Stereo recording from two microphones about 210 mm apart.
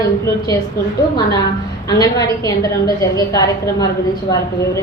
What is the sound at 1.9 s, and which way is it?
A woman's voice, 15° left (ahead or behind).